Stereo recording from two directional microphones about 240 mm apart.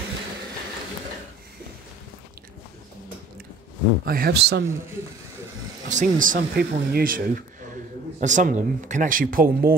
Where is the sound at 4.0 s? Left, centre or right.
Right.